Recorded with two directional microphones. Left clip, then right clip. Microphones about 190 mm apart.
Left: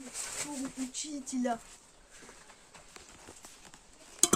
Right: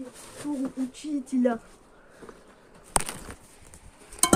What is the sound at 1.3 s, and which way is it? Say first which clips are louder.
Speech: right 8 dB; 15° right (ahead or behind).